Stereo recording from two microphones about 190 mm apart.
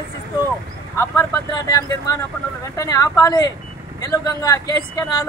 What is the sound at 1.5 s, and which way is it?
Speech, 20° left (ahead or behind).